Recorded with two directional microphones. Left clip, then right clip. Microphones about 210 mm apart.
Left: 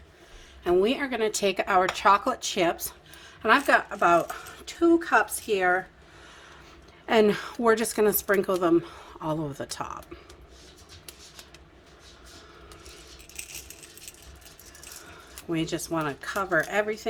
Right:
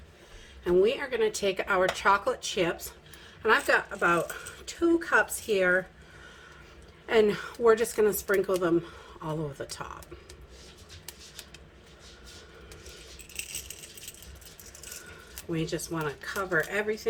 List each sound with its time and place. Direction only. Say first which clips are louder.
0.6 s speech: left 1 dB; 55° left (ahead or behind)
7.0 s speech: left 2 dB; 55° left (ahead or behind)
15.5 s speech: left 4 dB; 60° left (ahead or behind)